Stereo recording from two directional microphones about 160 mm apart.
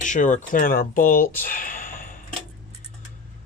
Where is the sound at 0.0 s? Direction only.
50° left (ahead or behind).